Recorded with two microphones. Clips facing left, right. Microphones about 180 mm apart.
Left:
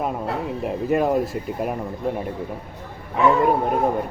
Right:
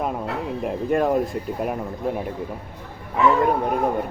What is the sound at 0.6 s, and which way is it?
Speech, 5° left (ahead or behind).